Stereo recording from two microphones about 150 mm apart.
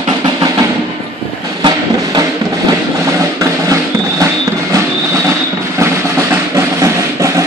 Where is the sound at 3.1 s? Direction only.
20° right (ahead or behind).